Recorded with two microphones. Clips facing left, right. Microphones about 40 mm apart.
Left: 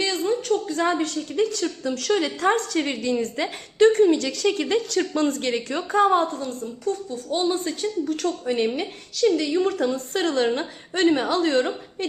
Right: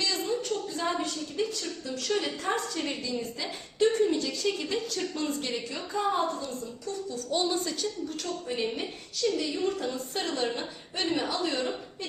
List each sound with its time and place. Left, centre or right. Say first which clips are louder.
0.0 s a sound: left 6 dB; left
0.7 s a woman's voice: left 8 dB; left
6.3 s a woman's voice: left 5 dB; left
7.3 s a woman's voice: left 5 dB; left
8.0 s a woman's voice: left 9 dB; left